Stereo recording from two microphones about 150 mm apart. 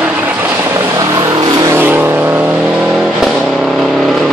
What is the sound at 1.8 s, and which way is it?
Vehicle, 15° right (ahead or behind).